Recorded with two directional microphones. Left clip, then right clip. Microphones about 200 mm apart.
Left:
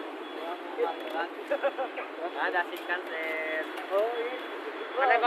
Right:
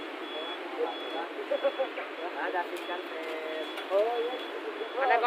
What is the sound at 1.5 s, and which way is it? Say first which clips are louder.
Speech: even; 45° left (ahead or behind).